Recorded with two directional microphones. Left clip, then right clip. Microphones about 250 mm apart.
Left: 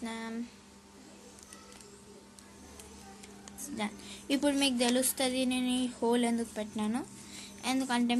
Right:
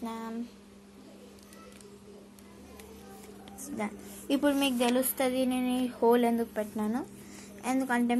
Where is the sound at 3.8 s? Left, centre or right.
Centre.